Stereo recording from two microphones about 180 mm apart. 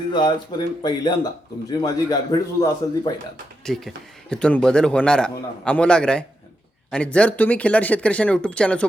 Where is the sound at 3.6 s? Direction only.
Centre (ahead or behind).